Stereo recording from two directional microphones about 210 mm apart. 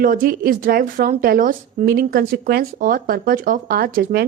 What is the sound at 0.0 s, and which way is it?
Speech, 40° right (ahead or behind).